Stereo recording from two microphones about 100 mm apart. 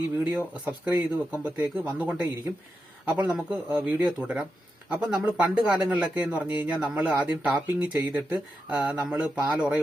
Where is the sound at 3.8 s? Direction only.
15° right (ahead or behind).